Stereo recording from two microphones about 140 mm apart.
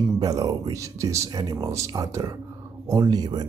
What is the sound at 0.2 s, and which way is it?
Speech, 25° right (ahead or behind).